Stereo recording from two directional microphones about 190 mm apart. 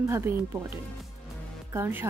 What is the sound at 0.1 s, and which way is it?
Speech, 10° right (ahead or behind).